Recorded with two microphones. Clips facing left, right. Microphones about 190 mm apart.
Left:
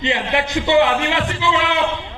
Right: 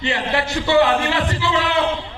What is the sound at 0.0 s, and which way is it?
A man's voice, 20° left (ahead or behind).